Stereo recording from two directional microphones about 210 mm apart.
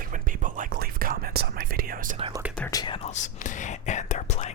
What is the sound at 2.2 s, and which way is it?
Speech, 20° right (ahead or behind).